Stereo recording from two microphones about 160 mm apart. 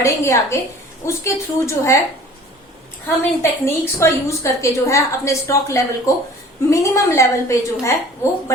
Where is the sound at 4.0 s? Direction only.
20° left (ahead or behind).